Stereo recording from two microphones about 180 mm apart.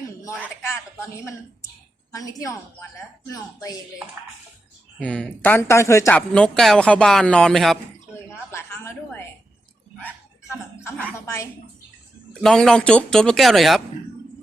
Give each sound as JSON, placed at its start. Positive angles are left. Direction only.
{"t": 0.3, "sound": "a sound", "side_deg": -10}
{"t": 0.7, "sound": "a woman's voice", "side_deg": 15}
{"t": 4.9, "sound": "speech", "side_deg": 5}
{"t": 8.3, "sound": "a sound", "side_deg": 15}
{"t": 10.5, "sound": "speech", "side_deg": 15}
{"t": 12.3, "sound": "speech", "side_deg": 5}